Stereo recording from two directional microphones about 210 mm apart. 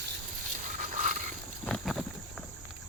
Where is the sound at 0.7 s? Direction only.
35° right (ahead or behind).